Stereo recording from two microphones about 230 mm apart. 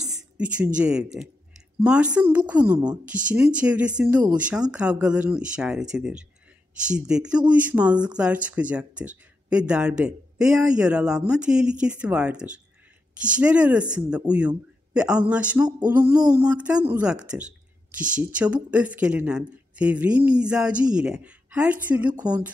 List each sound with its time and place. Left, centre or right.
0.4 s a woman's voice: centre
22.1 s a woman's voice: centre